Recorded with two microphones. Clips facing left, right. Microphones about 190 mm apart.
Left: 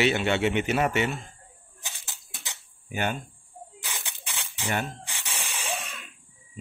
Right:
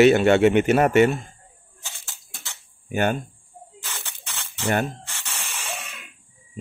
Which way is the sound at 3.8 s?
15° left (ahead or behind).